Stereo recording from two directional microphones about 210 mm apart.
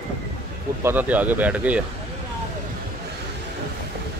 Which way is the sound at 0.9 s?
10° right (ahead or behind).